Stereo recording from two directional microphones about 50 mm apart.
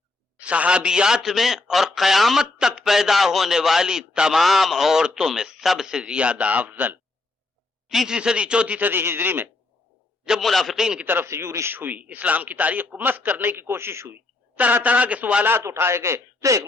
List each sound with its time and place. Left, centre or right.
0.3 s a man's voice: right
4.4 s a man's voice: centre
6.0 s a man's voice: right
7.9 s speech: centre
8.8 s a man's voice: right
10.4 s a man's voice: centre
11.0 s a man's voice: right
11.3 s a man's voice: right
11.7 s a man's voice: right
13.6 s speech: right
14.5 s speech: right
15.8 s a man's voice: right